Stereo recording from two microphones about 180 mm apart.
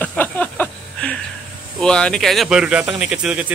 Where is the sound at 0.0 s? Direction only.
10° left (ahead or behind).